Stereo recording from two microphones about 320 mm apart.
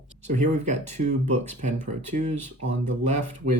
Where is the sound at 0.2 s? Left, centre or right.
Right.